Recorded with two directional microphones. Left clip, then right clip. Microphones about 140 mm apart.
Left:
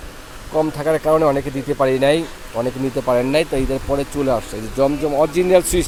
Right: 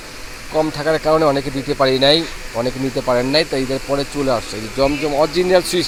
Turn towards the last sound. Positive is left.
turn(degrees=15)  # may be behind; listen again after turning